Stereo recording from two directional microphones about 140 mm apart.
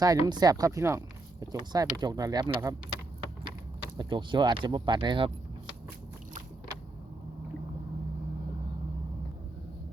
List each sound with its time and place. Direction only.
0.0 s speech: 30° right (ahead or behind)
3.9 s speech: 35° right (ahead or behind)